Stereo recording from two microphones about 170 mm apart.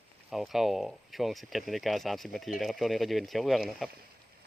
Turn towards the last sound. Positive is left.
turn(degrees=0)  # may be behind; listen again after turning